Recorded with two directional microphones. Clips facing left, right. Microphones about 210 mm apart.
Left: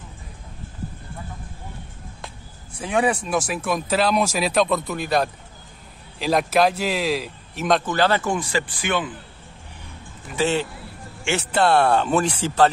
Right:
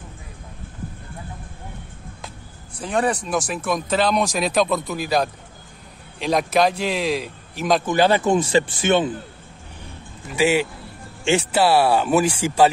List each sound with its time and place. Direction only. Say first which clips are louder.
2.8 s speech: even; 5° left (ahead or behind)
7.8 s speech: right 3 dB; 15° right (ahead or behind)
10.3 s speech: right 3 dB; 10° right (ahead or behind)